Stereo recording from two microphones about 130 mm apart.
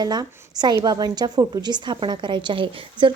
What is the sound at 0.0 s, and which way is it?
A woman's voice, 30° right (ahead or behind).